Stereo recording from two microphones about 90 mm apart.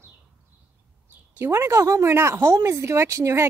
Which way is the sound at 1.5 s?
35° right (ahead or behind).